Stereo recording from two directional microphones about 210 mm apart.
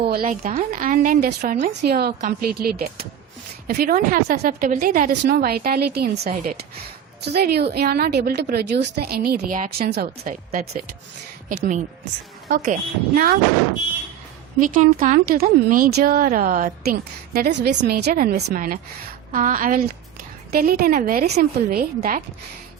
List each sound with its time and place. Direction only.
0.1 s a woman's voice: 40° right (ahead or behind)
12.5 s a woman's voice: 45° right (ahead or behind)
14.6 s a woman's voice: 40° right (ahead or behind)